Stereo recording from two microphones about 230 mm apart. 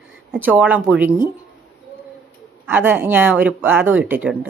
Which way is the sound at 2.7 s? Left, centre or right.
Centre.